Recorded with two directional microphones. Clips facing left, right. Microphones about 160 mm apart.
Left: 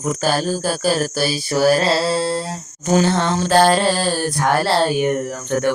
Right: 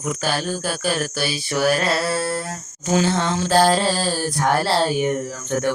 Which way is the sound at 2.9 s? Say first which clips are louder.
Left 3 dB; 50° left (ahead or behind).